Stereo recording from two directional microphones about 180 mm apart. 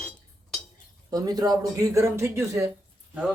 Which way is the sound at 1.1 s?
20° right (ahead or behind).